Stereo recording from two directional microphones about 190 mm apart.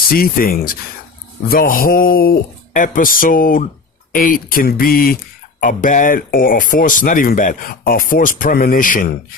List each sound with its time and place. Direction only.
0.1 s speech: 50° left (ahead or behind)